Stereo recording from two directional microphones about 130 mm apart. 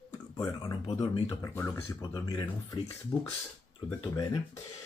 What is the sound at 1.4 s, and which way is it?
Speech, 20° left (ahead or behind).